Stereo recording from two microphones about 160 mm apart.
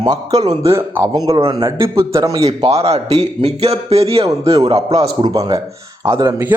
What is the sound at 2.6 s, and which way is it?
Speech, 40° right (ahead or behind).